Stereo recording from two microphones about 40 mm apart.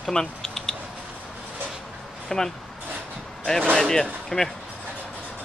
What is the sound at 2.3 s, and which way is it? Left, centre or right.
Speech, centre.